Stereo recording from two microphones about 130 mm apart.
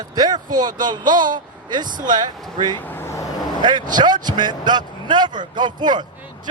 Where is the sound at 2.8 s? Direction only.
15° left (ahead or behind).